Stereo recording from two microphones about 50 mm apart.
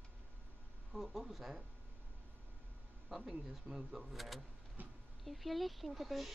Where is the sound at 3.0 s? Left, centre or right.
Centre.